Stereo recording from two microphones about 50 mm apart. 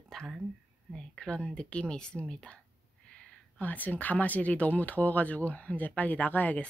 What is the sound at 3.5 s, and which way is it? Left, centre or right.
Speech, left.